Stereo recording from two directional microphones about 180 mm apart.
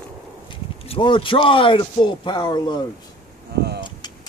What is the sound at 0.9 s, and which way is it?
A man's voice, 30° left (ahead or behind).